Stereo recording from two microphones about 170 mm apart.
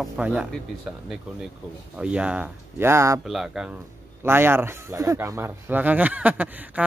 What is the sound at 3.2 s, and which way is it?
Speech, centre (ahead or behind).